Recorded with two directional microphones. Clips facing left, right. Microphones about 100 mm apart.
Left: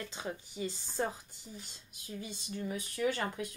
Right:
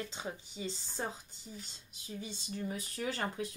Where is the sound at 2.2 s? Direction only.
35° right (ahead or behind).